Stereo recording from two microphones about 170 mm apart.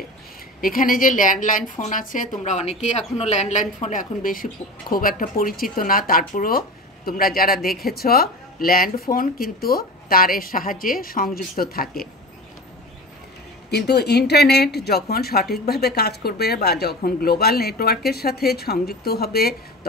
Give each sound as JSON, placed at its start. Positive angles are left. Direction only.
{"t": 0.6, "sound": "a woman's voice", "side_deg": 55}
{"t": 13.7, "sound": "speech", "side_deg": 75}